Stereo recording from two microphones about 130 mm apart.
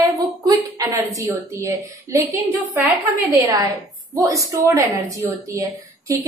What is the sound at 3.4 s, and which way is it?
A woman's voice, 30° right (ahead or behind).